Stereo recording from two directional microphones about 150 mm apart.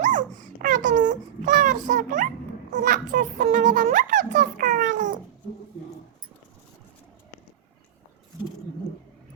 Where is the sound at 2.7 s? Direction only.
65° right (ahead or behind).